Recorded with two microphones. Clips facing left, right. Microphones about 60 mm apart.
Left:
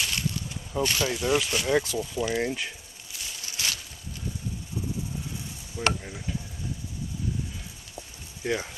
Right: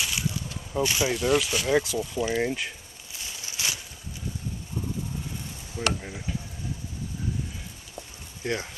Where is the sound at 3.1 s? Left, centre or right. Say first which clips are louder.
Even; right.